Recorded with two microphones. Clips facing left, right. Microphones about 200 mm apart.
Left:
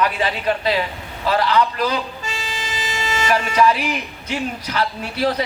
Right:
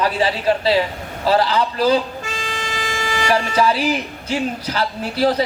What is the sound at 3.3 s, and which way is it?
A man's voice, 30° right (ahead or behind).